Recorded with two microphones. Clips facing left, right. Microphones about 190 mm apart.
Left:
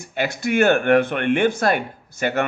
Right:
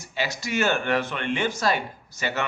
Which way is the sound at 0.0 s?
55° left (ahead or behind).